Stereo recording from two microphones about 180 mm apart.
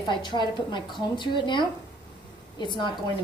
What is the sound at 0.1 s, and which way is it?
A woman's voice, 25° left (ahead or behind).